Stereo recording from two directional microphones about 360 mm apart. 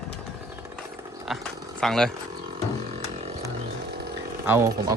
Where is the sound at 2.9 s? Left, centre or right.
Centre.